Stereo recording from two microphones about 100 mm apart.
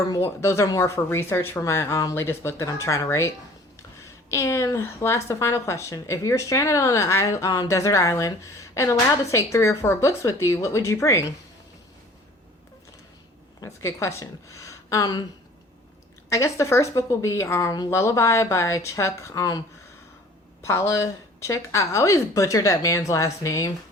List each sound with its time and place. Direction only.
0.1 s a woman's voice: 30° left (ahead or behind)
13.6 s a woman's voice: 30° left (ahead or behind)
16.3 s a woman's voice: 30° left (ahead or behind)